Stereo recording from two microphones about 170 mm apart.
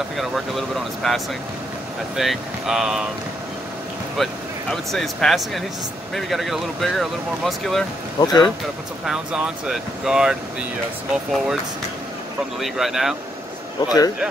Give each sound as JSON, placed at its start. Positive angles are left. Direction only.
{"t": 0.2, "sound": "speech", "side_deg": 0}
{"t": 4.2, "sound": "speech", "side_deg": 0}
{"t": 8.2, "sound": "a man's voice", "side_deg": 25}
{"t": 9.0, "sound": "speech", "side_deg": -5}
{"t": 12.5, "sound": "speech", "side_deg": 0}
{"t": 13.7, "sound": "a man's voice", "side_deg": 20}